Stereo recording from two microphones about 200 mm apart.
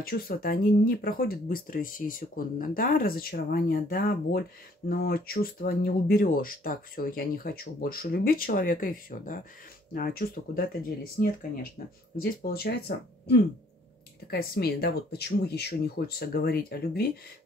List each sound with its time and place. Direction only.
0.0 s speech: 50° left (ahead or behind)